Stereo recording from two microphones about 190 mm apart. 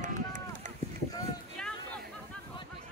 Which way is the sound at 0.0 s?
40° right (ahead or behind).